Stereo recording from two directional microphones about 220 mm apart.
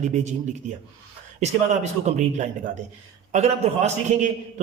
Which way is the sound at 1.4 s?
30° right (ahead or behind).